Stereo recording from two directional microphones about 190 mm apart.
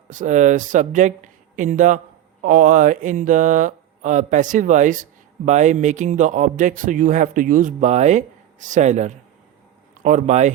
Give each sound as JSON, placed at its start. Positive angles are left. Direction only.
{"t": 0.1, "sound": "speech", "side_deg": -40}